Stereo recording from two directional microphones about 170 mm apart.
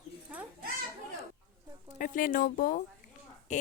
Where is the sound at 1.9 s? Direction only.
55° left (ahead or behind).